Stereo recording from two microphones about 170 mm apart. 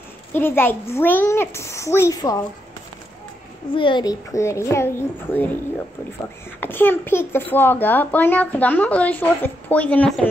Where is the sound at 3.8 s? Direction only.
30° left (ahead or behind); by 5.5 s 10° left (ahead or behind).